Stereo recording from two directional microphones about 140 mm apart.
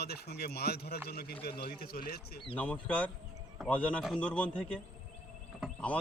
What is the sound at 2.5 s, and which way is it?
Speech, 10° left (ahead or behind).